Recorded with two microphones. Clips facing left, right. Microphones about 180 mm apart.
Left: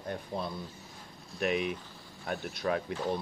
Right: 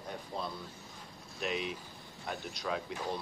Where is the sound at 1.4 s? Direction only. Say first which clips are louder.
Left 6 dB; 60° left (ahead or behind).